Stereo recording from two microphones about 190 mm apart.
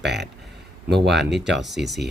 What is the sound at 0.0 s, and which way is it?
Speech, 60° right (ahead or behind).